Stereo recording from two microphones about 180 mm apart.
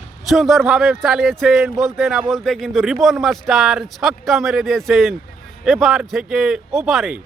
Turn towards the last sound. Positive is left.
turn(degrees=0)  # may be behind; listen again after turning